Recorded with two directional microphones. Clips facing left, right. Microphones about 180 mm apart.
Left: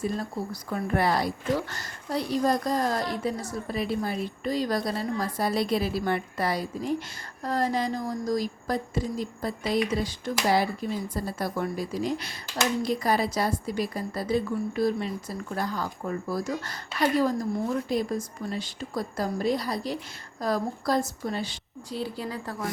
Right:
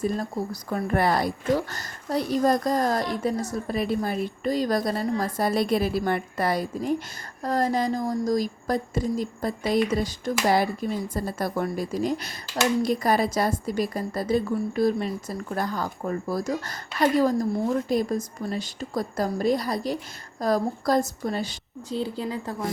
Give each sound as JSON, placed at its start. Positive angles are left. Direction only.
{"t": 0.0, "sound": "a woman's voice", "side_deg": -45}
{"t": 21.8, "sound": "speech", "side_deg": -20}